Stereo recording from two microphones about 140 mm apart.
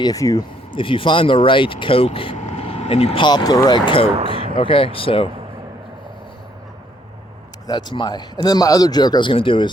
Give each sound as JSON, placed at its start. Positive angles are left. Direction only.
{"t": 0.0, "sound": "speech", "side_deg": 25}
{"t": 0.7, "sound": "speech", "side_deg": 40}
{"t": 2.3, "sound": "speech", "side_deg": 55}
{"t": 3.8, "sound": "speech", "side_deg": 40}
{"t": 7.7, "sound": "speech", "side_deg": 30}